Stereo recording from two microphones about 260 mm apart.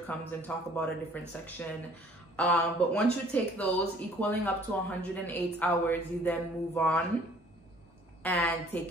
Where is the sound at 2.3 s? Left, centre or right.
Centre.